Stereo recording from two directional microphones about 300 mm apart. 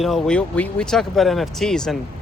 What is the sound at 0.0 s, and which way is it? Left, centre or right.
Speech, centre.